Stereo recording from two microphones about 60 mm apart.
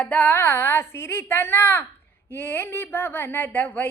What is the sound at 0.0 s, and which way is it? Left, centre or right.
A woman's voice, left.